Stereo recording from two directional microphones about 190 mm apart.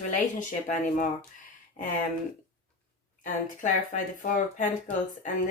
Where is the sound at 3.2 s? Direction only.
40° left (ahead or behind).